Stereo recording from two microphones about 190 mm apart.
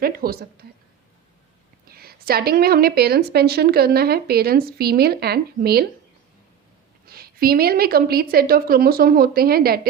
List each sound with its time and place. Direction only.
0.0 s a woman's voice: 50° right (ahead or behind)
1.9 s a woman's voice: 55° right (ahead or behind)
7.1 s a woman's voice: 50° right (ahead or behind)